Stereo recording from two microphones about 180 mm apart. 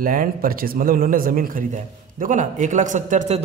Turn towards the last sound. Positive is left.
turn(degrees=-40)  # may be behind; listen again after turning